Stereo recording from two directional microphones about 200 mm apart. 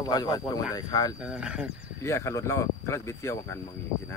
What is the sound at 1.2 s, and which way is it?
Speech, 5° right (ahead or behind).